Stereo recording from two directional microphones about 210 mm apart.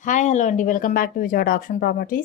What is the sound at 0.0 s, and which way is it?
Speech, 35° left (ahead or behind).